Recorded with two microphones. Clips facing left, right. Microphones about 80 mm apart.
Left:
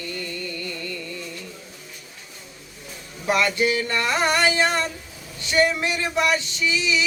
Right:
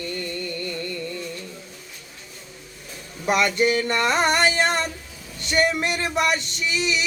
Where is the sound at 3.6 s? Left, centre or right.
Right.